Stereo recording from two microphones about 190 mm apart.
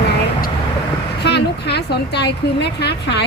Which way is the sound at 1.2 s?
60° left (ahead or behind).